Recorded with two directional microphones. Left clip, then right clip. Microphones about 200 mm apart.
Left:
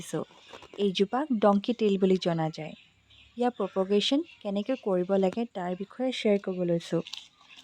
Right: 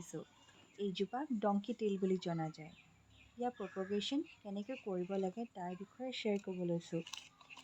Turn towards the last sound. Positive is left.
turn(degrees=55)  # may be behind; listen again after turning